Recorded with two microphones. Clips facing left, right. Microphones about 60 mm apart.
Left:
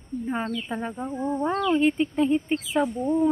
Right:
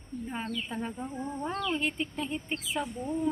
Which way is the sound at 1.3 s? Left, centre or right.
Left.